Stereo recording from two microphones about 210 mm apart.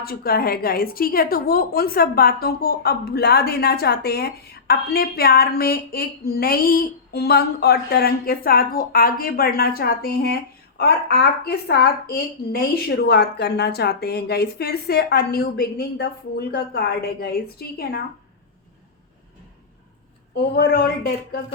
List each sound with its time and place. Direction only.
0.0 s a woman's voice: 45° left (ahead or behind)
20.3 s a woman's voice: 45° left (ahead or behind)